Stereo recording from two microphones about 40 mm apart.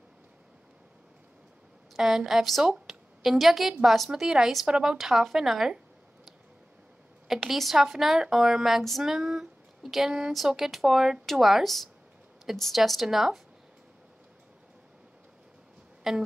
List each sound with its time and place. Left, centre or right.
2.0 s a woman's voice: centre
4.1 s a woman's voice: centre
4.9 s speech: centre
7.2 s a woman's voice: centre
9.0 s a sound: centre
10.3 s a woman's voice: centre
11.6 s speech: centre
16.1 s speech: centre